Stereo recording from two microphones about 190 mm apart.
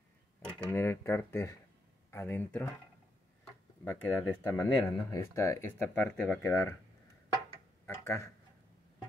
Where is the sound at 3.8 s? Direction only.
10° left (ahead or behind).